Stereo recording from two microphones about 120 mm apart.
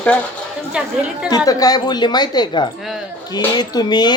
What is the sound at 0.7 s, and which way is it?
Speech, 10° right (ahead or behind).